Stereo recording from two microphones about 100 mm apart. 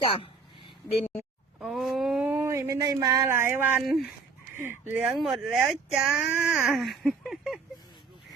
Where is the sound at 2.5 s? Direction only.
30° right (ahead or behind).